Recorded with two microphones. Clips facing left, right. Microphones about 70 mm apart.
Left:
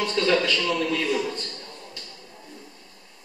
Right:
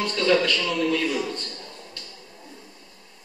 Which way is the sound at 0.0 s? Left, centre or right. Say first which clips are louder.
Right 1 dB; centre.